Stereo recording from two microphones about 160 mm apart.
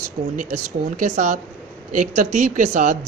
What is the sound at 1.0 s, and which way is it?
Speech, 50° right (ahead or behind).